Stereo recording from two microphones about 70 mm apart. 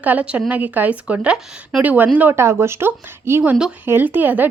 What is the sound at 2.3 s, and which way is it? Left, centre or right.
Speech, right.